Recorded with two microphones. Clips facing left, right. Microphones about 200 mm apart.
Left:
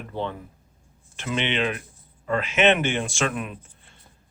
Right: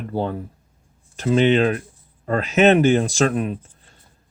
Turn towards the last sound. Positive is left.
turn(degrees=-35)  # may be behind; listen again after turning